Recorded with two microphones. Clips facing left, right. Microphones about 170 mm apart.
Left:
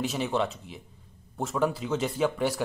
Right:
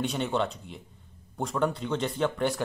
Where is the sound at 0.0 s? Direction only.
Centre (ahead or behind).